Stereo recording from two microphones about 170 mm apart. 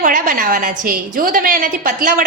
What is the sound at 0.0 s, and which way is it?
A woman's voice, 50° right (ahead or behind).